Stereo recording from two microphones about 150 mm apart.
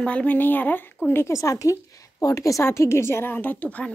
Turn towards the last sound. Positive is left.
turn(degrees=10)  # may be behind; listen again after turning